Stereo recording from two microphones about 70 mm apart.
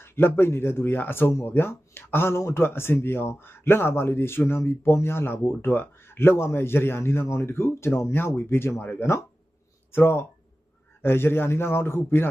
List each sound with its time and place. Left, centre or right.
0.0 s speech: left